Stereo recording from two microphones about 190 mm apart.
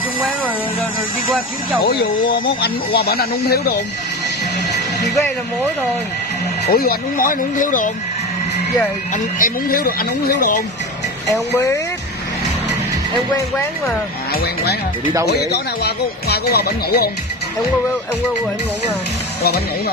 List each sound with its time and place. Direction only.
2.3 s speech: 55° left (ahead or behind)
6.7 s speech: 55° left (ahead or behind)
9.4 s speech: 50° left (ahead or behind)
11.3 s speech: 15° left (ahead or behind)
14.4 s speech: 55° left (ahead or behind)
19.4 s speech: 55° left (ahead or behind)